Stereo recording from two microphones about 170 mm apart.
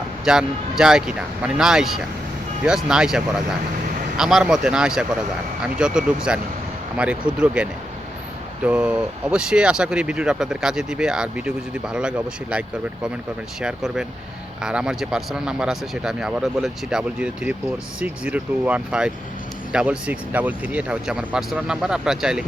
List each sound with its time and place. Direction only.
0.3 s speech: 5° right (ahead or behind)